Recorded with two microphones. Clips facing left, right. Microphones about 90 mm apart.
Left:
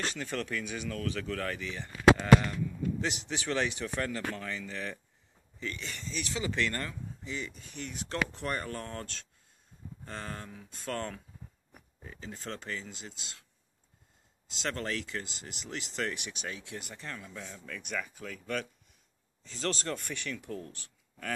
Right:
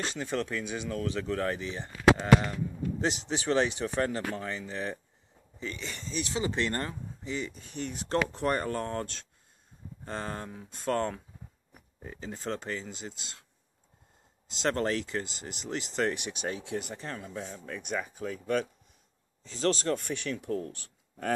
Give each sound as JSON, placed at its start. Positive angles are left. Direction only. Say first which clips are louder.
{"t": 0.1, "sound": "speech", "louder": "right 3 dB", "side_deg": -25}
{"t": 5.9, "sound": "speech", "louder": "right 6 dB", "side_deg": -30}
{"t": 14.5, "sound": "speech", "louder": "right 6 dB", "side_deg": -35}